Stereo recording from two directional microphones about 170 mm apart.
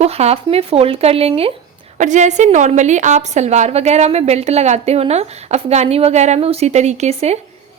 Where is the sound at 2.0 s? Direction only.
45° right (ahead or behind).